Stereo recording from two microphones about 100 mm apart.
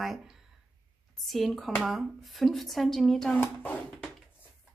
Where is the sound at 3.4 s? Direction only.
15° left (ahead or behind).